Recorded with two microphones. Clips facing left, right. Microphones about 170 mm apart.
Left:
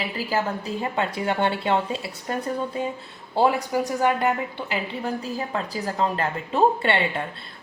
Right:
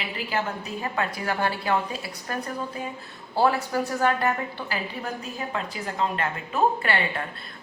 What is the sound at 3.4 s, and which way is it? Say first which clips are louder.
A woman's voice: left 2 dB; 15° left (ahead or behind).